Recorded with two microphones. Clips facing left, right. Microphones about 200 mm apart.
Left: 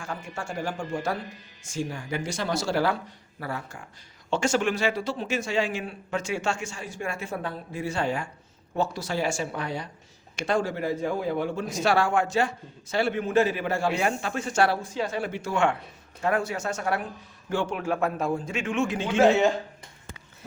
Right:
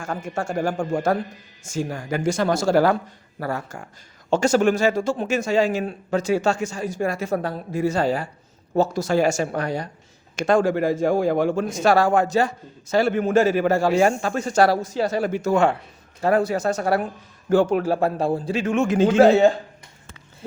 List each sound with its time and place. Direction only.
0.0 s a man's voice: 45° right (ahead or behind)
10.6 s speech: 90° right
11.0 s a man's voice: 80° right
11.7 s speech: 45° right (ahead or behind)